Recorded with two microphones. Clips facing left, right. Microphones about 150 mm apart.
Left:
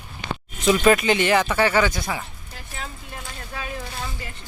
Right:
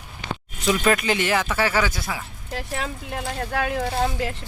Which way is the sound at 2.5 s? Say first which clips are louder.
Right 12 dB; 80° right.